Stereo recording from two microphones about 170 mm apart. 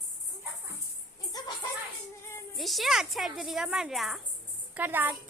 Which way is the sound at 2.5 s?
Centre (ahead or behind).